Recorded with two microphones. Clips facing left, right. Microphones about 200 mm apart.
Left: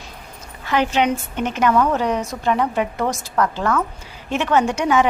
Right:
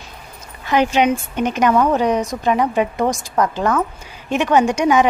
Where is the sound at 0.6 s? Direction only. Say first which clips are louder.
Right 3 dB; 15° right (ahead or behind).